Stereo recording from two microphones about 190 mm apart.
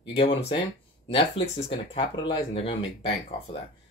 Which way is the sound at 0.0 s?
30° left (ahead or behind).